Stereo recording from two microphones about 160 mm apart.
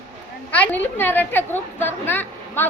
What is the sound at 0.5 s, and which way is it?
A woman's voice, 10° left (ahead or behind).